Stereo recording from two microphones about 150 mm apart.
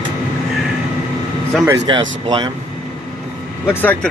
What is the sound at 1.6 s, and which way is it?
Speech, 25° right (ahead or behind).